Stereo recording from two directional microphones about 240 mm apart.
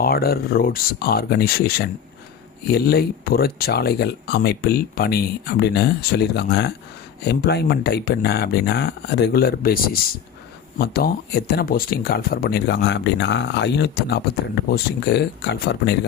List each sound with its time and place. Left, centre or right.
0.0 s speech: left